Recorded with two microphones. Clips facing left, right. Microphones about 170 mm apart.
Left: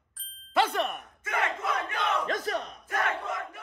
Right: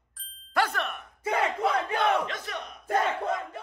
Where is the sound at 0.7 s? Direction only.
35° left (ahead or behind).